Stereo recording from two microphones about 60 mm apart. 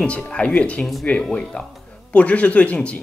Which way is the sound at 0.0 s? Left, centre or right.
Left.